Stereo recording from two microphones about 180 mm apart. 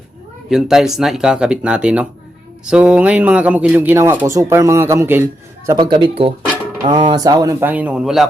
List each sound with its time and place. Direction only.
0.5 s speech: centre (ahead or behind)
5.7 s speech: 25° right (ahead or behind); by 8.3 s centre (ahead or behind)